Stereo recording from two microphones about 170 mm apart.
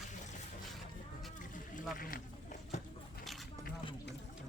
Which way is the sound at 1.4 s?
50° left (ahead or behind).